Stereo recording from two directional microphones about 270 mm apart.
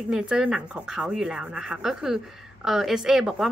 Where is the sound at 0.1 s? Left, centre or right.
Centre.